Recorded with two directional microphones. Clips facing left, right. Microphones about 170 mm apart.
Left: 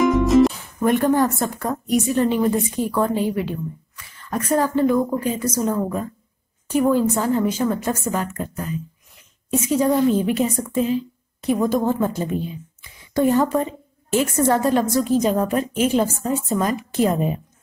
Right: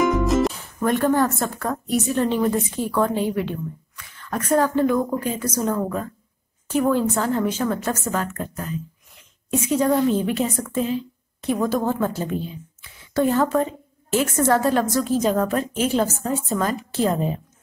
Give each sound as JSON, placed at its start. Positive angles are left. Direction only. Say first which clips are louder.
{"t": 0.0, "sound": "music", "louder": "left 4 dB", "side_deg": 0}
{"t": 0.8, "sound": "a woman's voice", "louder": "left 2 dB", "side_deg": 15}
{"t": 9.5, "sound": "a woman's voice", "louder": "left 1 dB", "side_deg": 0}
{"t": 13.1, "sound": "a woman's voice", "louder": "left 2 dB", "side_deg": 15}
{"t": 13.6, "sound": "a sound", "louder": "right 1 dB", "side_deg": 0}
{"t": 14.2, "sound": "a woman's voice", "louder": "even", "side_deg": 10}